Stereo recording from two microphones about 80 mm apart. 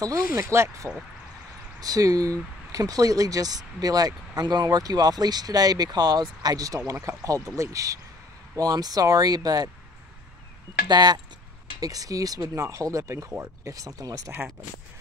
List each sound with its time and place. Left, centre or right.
0.0 s speech: right
1.8 s speech: right
10.9 s speech: right
11.8 s speech: right